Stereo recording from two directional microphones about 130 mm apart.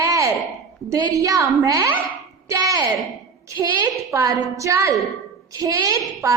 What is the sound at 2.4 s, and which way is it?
Speech, 25° right (ahead or behind).